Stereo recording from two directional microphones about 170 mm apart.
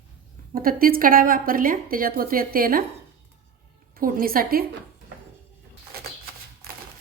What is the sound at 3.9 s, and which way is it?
Speech, 60° right (ahead or behind).